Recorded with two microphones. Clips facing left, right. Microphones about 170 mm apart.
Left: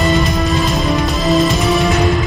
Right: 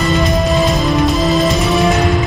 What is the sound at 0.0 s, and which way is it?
Music, centre (ahead or behind).